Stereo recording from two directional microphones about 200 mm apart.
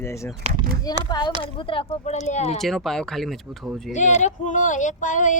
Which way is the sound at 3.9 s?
35° left (ahead or behind).